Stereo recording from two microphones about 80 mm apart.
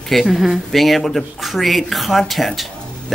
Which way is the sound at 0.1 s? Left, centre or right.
Centre.